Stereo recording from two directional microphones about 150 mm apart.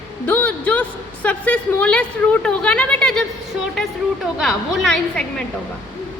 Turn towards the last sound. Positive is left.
turn(degrees=5)  # may be behind; listen again after turning